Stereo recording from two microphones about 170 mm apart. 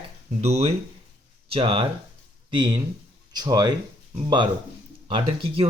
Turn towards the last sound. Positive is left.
turn(degrees=-30)  # may be behind; listen again after turning